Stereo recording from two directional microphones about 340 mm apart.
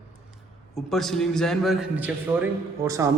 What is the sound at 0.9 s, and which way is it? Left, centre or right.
A man's voice, centre.